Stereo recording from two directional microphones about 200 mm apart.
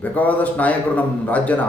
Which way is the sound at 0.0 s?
10° left (ahead or behind).